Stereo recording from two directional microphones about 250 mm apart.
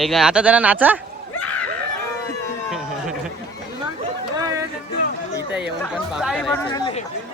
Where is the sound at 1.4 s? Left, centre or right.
Centre.